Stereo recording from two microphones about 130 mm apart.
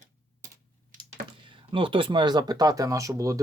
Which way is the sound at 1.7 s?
40° right (ahead or behind).